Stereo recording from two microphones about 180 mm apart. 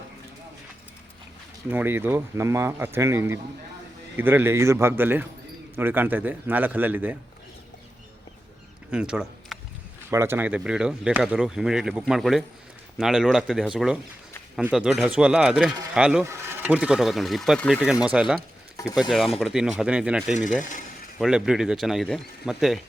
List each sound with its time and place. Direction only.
1.7 s speech: 10° right (ahead or behind)
8.9 s speech: 5° right (ahead or behind)
20.3 s speech: 45° left (ahead or behind)
21.2 s speech: 5° right (ahead or behind)